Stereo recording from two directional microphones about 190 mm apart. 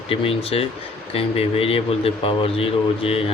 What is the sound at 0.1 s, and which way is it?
Speech, 30° left (ahead or behind).